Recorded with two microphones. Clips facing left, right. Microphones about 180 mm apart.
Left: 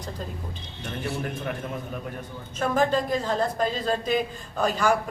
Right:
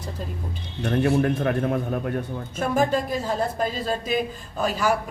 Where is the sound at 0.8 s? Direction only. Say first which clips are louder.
Right 11 dB; 65° right (ahead or behind).